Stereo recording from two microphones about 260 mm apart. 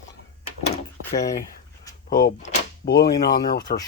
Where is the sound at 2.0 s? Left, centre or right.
Left.